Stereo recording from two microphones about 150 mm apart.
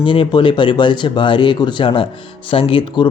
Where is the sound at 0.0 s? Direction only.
35° left (ahead or behind).